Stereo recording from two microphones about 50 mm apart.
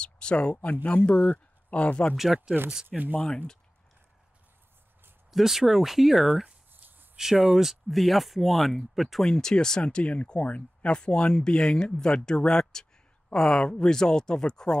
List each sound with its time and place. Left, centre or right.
0.0 s speech: centre
2.1 s speech: centre
5.3 s speech: centre
6.7 s a sound: right
7.5 s speech: centre
9.2 s speech: centre